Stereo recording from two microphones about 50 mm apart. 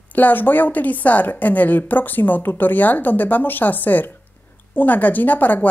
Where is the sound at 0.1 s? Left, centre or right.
Left.